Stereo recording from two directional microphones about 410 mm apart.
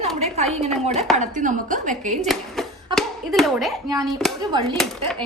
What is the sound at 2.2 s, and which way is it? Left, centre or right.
Speech, centre.